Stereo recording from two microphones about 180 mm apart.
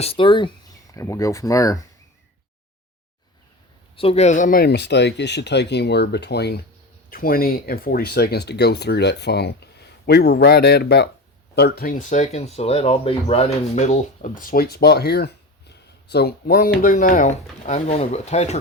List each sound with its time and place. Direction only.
0.0 s speech: 30° left (ahead or behind)
3.9 s speech: 35° left (ahead or behind); by 6.6 s 65° left (ahead or behind)
7.1 s speech: 55° left (ahead or behind); by 18.5 s 35° left (ahead or behind)